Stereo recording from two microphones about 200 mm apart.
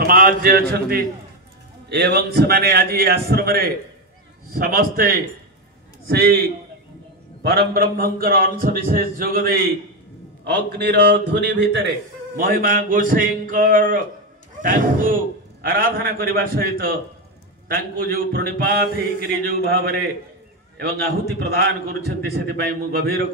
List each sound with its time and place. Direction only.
0.0 s a man's voice: 45° right (ahead or behind)
7.4 s a man's voice: 50° right (ahead or behind)